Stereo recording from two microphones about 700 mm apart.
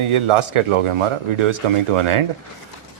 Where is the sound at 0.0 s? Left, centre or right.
Right.